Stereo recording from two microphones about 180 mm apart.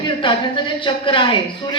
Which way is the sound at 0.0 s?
25° left (ahead or behind).